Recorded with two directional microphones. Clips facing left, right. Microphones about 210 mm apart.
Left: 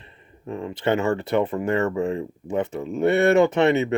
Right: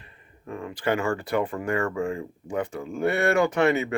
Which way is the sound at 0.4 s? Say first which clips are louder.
Left 3 dB; 25° left (ahead or behind).